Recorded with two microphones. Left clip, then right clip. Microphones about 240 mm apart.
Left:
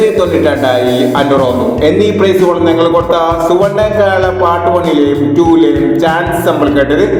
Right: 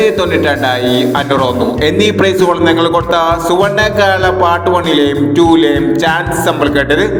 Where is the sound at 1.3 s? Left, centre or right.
Right.